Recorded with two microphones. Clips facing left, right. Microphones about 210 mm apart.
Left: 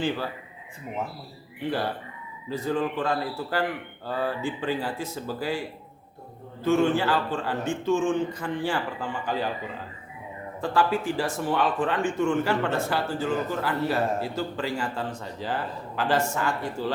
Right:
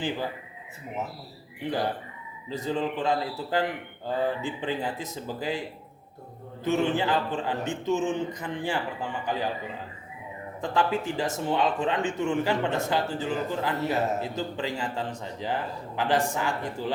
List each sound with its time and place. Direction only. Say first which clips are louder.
1.6 s speech: even; 20° right (ahead or behind)
6.7 s speech: left 3 dB; 20° right (ahead or behind)
10.6 s speech: left 2 dB; 20° right (ahead or behind)